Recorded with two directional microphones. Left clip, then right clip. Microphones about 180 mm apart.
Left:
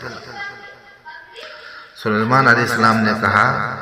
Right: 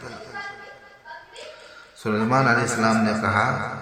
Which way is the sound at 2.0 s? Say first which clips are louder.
Left 6 dB; 15° left (ahead or behind).